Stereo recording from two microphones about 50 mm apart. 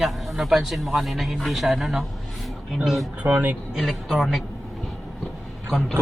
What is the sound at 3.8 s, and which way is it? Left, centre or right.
Speech, centre.